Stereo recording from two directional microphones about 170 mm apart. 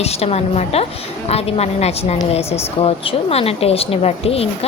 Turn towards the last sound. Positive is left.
turn(degrees=35)  # may be behind; listen again after turning